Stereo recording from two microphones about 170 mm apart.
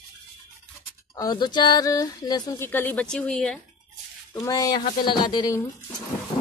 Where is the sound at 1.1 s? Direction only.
25° left (ahead or behind); by 3.6 s 5° left (ahead or behind).